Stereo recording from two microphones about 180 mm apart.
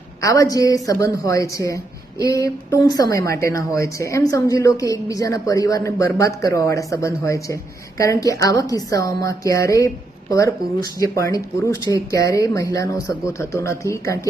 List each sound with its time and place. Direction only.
0.2 s a woman's voice: 20° left (ahead or behind)